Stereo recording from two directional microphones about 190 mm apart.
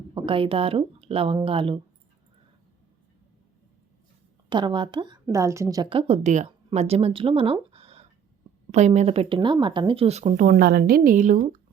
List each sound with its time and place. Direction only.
0.1 s speech: 25° right (ahead or behind)
4.4 s a woman's voice: 25° right (ahead or behind); by 11.3 s 45° right (ahead or behind)